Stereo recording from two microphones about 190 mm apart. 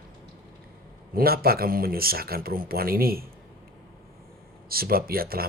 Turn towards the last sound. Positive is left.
turn(degrees=-50)  # may be behind; listen again after turning